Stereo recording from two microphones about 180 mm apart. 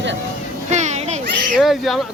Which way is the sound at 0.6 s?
40° right (ahead or behind).